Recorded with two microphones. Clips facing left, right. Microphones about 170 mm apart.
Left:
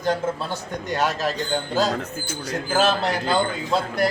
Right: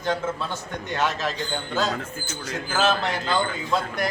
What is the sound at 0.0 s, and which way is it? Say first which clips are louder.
A man's voice: left 3 dB; 35° left (ahead or behind).